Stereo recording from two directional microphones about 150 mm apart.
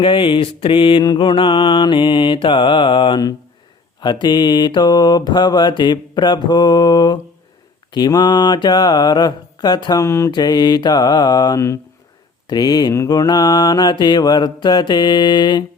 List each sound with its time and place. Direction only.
0.0 s mantra: 35° left (ahead or behind)